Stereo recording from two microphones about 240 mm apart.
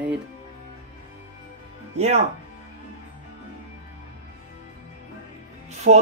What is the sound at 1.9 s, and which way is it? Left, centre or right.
Speech, right.